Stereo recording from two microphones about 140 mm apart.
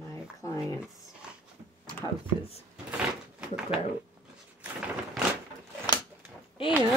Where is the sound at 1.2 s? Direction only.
5° right (ahead or behind).